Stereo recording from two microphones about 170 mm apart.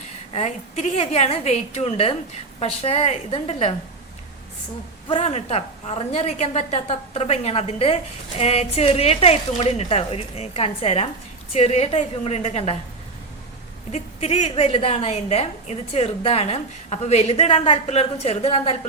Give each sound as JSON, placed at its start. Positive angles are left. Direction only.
{"t": 0.3, "sound": "a woman's voice", "side_deg": 40}
{"t": 5.0, "sound": "a woman's voice", "side_deg": 35}
{"t": 13.9, "sound": "a woman's voice", "side_deg": 40}